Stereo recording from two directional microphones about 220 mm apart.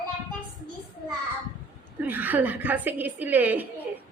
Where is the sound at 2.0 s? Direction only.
10° right (ahead or behind).